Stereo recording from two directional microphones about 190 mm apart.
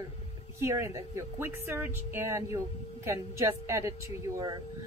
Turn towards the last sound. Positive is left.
turn(degrees=-20)  # may be behind; listen again after turning